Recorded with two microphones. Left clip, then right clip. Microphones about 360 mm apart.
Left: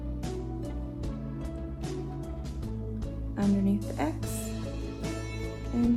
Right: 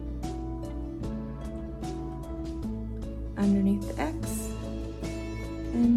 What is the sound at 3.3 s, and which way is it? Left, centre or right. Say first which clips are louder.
Music: right 2 dB; centre.